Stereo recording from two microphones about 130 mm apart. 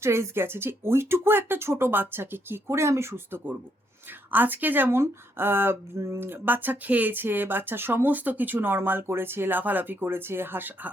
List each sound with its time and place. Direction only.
0.0 s speech: 20° right (ahead or behind)